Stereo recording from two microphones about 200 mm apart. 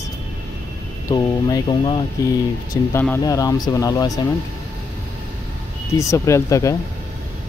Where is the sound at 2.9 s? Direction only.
10° left (ahead or behind).